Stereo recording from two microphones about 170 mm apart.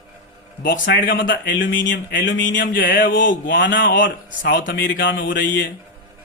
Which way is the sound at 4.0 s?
90° left.